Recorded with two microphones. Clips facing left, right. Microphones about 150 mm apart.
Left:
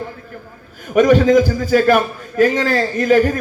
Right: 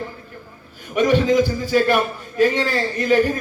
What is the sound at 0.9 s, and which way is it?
A man's voice, 45° left (ahead or behind).